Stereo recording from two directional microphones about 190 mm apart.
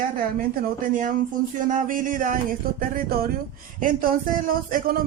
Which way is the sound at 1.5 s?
45° right (ahead or behind).